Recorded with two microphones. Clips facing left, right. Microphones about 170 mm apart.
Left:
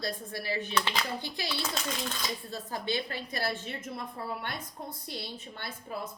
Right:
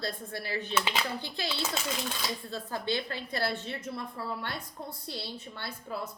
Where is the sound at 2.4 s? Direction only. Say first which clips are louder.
Right 2 dB; 20° left (ahead or behind).